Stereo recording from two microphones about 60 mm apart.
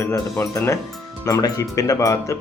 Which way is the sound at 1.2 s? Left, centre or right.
Left.